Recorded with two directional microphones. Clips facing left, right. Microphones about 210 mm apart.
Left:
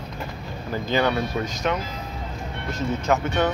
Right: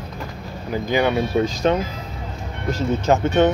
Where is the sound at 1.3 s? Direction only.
30° right (ahead or behind).